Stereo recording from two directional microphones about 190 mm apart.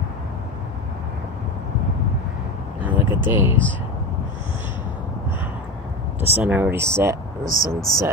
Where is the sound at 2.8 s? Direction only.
10° right (ahead or behind).